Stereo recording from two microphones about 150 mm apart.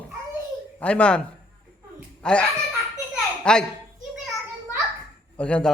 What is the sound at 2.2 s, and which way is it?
A man's voice, 5° left (ahead or behind).